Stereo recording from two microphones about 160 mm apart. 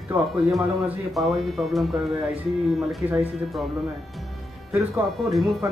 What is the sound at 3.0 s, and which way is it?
Speech, 15° right (ahead or behind).